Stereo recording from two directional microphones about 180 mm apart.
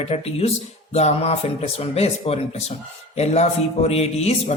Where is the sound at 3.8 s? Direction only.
35° left (ahead or behind).